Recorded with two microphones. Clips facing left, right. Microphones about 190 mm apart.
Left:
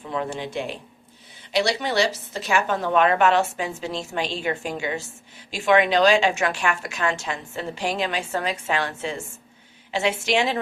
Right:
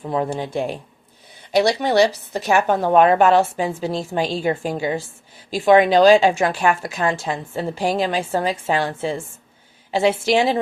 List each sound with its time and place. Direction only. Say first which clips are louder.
0.1 s a woman's voice: right 5 dB; 40° right (ahead or behind)
2.0 s a woman's voice: right 6 dB; 60° right (ahead or behind)
2.6 s a woman's voice: right 6 dB; 40° right (ahead or behind)